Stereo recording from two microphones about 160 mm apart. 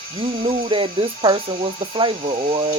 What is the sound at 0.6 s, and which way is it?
Speech, 30° right (ahead or behind).